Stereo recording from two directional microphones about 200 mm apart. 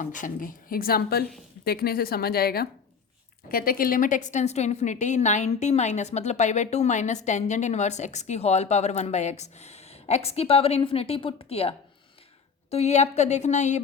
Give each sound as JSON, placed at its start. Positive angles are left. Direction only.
{"t": 0.0, "sound": "a woman's voice", "side_deg": 40}
{"t": 12.7, "sound": "a woman's voice", "side_deg": 35}